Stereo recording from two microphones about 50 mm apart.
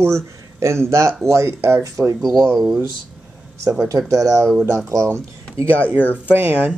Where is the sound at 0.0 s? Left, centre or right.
Right.